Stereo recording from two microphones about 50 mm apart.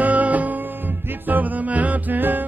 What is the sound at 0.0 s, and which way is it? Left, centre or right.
Music, right.